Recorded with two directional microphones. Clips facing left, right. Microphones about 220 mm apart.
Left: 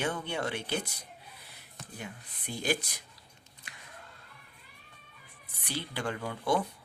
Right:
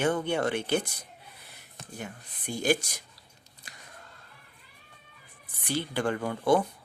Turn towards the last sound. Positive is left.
turn(degrees=-50)  # may be behind; listen again after turning